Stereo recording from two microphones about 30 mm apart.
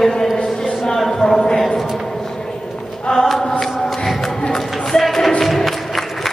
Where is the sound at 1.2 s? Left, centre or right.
Left.